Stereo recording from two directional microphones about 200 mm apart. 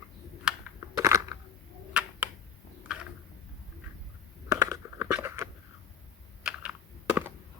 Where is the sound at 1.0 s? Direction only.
15° right (ahead or behind).